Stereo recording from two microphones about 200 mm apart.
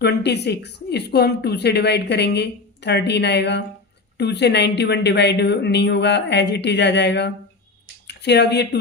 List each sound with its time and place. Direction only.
0.0 s a woman's voice: 55° left (ahead or behind)